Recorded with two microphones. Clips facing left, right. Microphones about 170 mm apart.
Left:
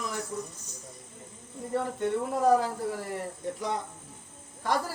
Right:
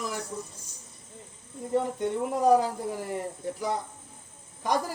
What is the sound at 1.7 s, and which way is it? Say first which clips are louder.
A man's voice: right 1 dB; 15° right (ahead or behind).